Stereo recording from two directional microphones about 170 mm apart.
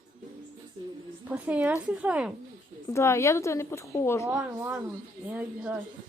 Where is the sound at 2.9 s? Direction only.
15° left (ahead or behind).